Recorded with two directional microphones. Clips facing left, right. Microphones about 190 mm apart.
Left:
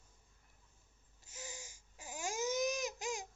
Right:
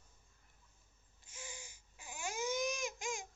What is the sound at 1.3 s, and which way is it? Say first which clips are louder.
Baby cry: left 2 dB; 40° left (ahead or behind).